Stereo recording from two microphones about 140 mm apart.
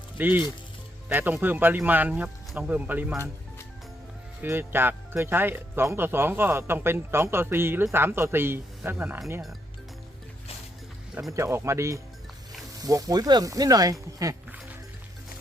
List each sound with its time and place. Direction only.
0.2 s speech: 15° right (ahead or behind)
4.4 s speech: 15° right (ahead or behind)
11.3 s speech: 20° right (ahead or behind)